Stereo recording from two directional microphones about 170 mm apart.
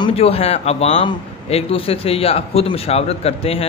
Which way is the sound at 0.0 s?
35° left (ahead or behind).